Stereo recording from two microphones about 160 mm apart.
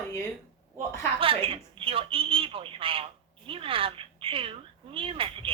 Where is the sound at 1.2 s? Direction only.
35° right (ahead or behind).